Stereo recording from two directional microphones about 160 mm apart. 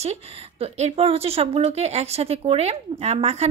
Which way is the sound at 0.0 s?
40° right (ahead or behind).